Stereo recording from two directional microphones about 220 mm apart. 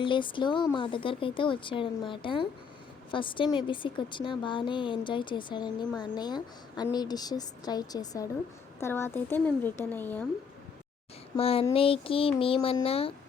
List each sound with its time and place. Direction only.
0.0 s a woman's voice: 20° left (ahead or behind)
11.3 s a woman's voice: 25° left (ahead or behind)